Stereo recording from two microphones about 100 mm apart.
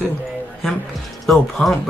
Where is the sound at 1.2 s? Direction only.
Centre (ahead or behind).